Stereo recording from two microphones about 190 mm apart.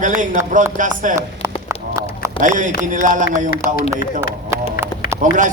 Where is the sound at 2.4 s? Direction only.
40° right (ahead or behind).